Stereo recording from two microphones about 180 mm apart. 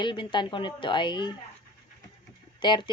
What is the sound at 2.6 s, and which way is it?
Speech, 25° left (ahead or behind).